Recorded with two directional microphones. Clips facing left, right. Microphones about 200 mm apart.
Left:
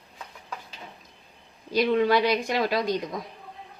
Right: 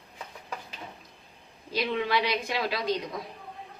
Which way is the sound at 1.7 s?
45° left (ahead or behind).